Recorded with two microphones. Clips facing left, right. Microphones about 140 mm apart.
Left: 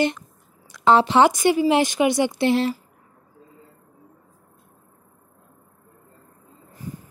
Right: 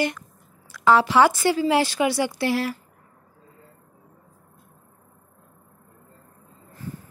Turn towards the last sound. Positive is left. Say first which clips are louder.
# even
turn(degrees=15)  # may be behind; listen again after turning